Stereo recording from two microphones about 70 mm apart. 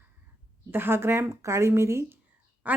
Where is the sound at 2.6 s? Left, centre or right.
Right.